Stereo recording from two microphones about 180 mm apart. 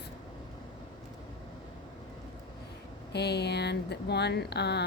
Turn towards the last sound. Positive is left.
turn(degrees=65)  # may be behind; listen again after turning